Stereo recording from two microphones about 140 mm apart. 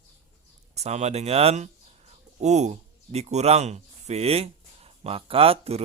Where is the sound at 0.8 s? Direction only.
50° right (ahead or behind).